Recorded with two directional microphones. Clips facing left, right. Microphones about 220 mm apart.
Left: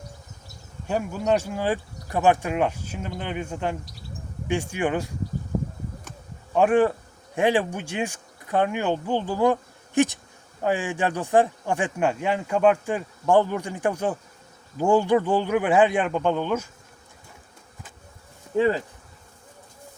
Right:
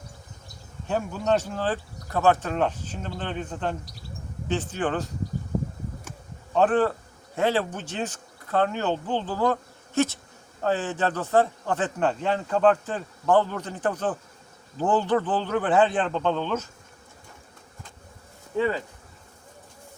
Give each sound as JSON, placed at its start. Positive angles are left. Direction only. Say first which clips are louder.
{"t": 0.9, "sound": "speech", "louder": "left 1 dB", "side_deg": 10}
{"t": 6.5, "sound": "speech", "louder": "left 2 dB", "side_deg": 10}
{"t": 18.5, "sound": "insect", "louder": "left 4 dB", "side_deg": 25}